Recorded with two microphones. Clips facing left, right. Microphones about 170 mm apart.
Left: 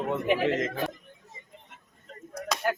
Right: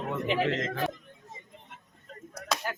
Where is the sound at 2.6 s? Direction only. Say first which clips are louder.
Left 7 dB; 60° left (ahead or behind).